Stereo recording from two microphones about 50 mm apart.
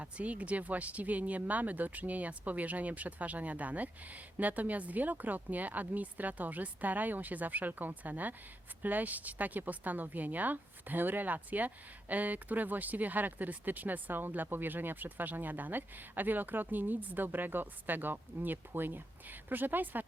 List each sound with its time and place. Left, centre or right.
0.0 s a woman's voice: right